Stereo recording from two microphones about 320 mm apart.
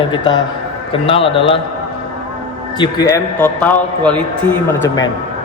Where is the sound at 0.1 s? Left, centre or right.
Centre.